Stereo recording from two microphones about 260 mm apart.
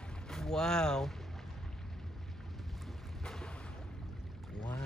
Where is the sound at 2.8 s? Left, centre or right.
Centre.